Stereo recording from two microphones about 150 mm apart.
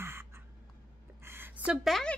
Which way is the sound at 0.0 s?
15° right (ahead or behind).